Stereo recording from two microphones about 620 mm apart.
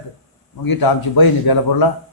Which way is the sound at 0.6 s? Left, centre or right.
Left.